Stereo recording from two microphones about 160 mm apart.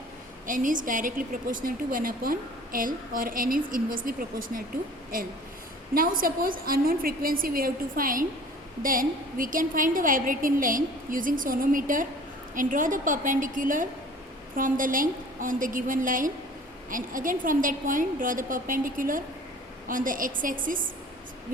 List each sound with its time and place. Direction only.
0.4 s a woman's voice: 55° right (ahead or behind)